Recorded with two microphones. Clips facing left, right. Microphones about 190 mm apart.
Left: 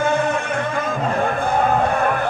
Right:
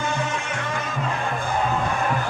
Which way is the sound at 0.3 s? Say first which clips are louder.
Left 6 dB; 55° left (ahead or behind).